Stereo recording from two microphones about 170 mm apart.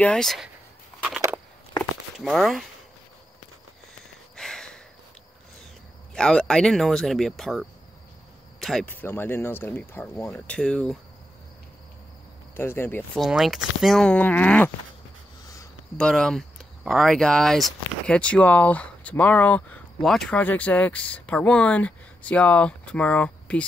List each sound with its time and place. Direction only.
0.0 s speech: 5° left (ahead or behind)
2.1 s speech: centre (ahead or behind)
4.4 s a sound: 5° left (ahead or behind)
6.1 s speech: 5° left (ahead or behind)
8.5 s cricket: centre (ahead or behind)
8.8 s speech: 10° left (ahead or behind)
12.5 s speech: 15° left (ahead or behind)
13.2 s speech: centre (ahead or behind)
15.4 s a sound: 20° left (ahead or behind)
16.0 s speech: 5° left (ahead or behind)